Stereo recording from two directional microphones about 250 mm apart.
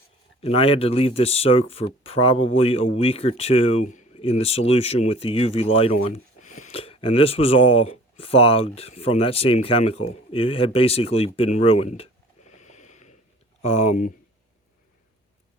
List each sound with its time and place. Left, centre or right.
0.4 s speech: left
12.5 s a sound: left
13.6 s speech: left